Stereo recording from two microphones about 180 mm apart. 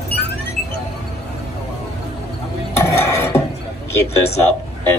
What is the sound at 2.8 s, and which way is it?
Dishes, 15° left (ahead or behind).